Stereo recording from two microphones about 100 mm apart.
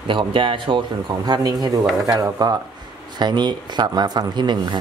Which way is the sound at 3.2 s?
45° right (ahead or behind).